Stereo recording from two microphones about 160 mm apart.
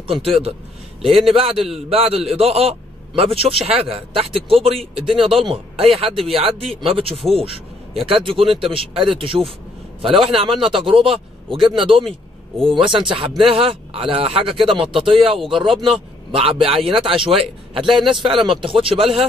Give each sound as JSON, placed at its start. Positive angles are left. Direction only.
{"t": 0.0, "sound": "a man's voice", "side_deg": -35}